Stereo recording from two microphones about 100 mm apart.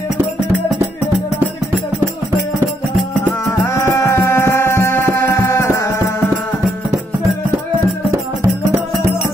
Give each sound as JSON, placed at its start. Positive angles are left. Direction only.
{"t": 3.3, "sound": "music", "side_deg": 25}